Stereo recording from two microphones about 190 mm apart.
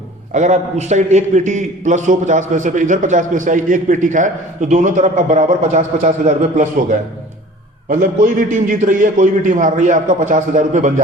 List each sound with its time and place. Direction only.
0.3 s a man's voice: 40° right (ahead or behind)
7.9 s a man's voice: 45° right (ahead or behind)